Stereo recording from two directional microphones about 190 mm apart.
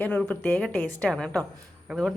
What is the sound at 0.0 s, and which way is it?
A woman's voice, 5° left (ahead or behind).